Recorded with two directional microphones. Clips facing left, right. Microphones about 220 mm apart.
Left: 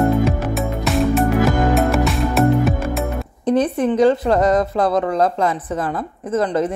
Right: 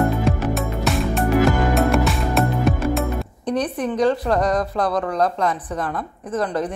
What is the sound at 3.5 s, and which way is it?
Speech, 25° left (ahead or behind).